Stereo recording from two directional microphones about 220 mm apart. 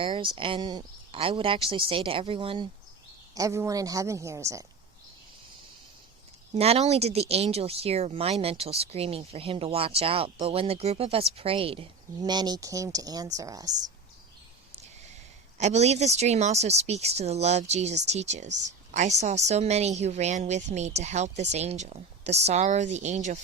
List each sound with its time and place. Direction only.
0.0 s speech: 25° right (ahead or behind)
3.3 s a woman's voice: 15° right (ahead or behind)
6.5 s speech: 30° right (ahead or behind)
15.5 s a woman's voice: 30° right (ahead or behind)